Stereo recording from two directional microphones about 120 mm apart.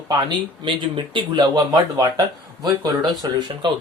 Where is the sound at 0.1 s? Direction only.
40° right (ahead or behind).